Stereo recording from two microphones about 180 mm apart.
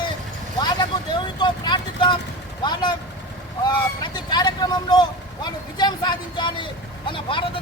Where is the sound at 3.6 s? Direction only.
25° left (ahead or behind).